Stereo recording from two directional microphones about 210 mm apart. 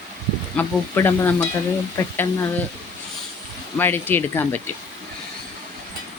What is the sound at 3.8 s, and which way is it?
Speech, 10° left (ahead or behind).